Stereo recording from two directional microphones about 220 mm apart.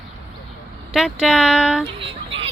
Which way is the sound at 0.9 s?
Centre (ahead or behind).